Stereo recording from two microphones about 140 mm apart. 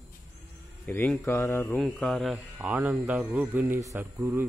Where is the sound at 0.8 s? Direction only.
10° left (ahead or behind).